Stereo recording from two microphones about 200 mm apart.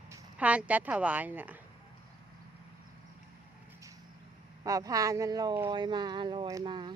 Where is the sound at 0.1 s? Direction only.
5° right (ahead or behind).